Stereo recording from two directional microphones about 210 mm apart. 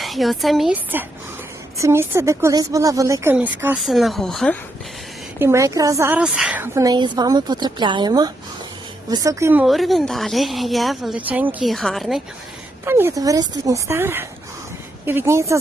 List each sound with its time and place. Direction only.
0.0 s a woman's voice: centre (ahead or behind)
5.4 s a woman's voice: 15° right (ahead or behind)
12.8 s a woman's voice: 10° right (ahead or behind)